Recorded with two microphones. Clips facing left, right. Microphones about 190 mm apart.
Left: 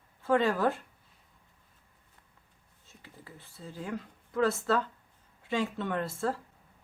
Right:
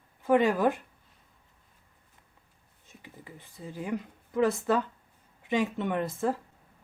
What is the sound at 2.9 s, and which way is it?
Speech, 15° right (ahead or behind).